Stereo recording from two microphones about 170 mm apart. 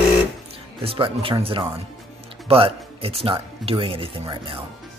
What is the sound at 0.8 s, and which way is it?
Speech, 35° right (ahead or behind).